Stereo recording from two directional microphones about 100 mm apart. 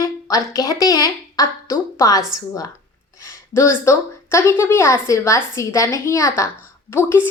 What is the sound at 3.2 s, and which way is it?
A woman's voice, 30° left (ahead or behind).